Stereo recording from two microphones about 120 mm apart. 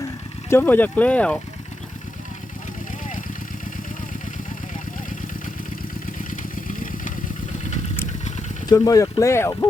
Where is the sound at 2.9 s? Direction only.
90° left.